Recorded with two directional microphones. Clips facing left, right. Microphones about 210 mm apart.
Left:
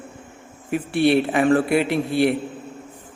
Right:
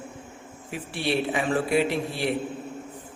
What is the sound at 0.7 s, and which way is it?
A man's voice, 60° left (ahead or behind).